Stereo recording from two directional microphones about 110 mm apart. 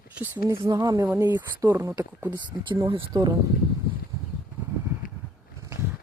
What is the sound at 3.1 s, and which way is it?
Speech, 35° right (ahead or behind).